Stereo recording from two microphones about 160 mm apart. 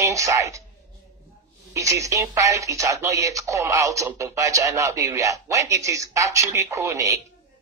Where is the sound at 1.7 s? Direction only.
20° right (ahead or behind).